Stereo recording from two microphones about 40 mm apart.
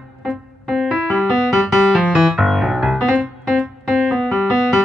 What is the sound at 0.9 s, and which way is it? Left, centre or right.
Music, centre.